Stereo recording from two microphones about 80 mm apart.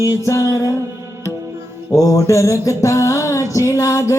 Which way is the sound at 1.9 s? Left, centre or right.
Left.